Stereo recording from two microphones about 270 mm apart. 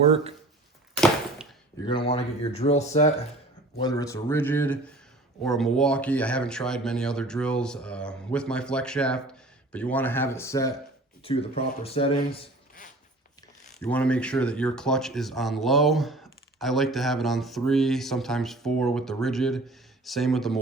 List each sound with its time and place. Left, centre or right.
0.0 s speech: right
1.0 s a sound: centre
1.8 s speech: centre
3.8 s speech: centre
11.2 s speech: left
13.7 s speech: centre